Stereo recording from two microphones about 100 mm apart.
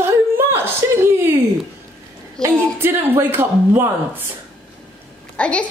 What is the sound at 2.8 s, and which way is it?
A woman's voice, 20° right (ahead or behind).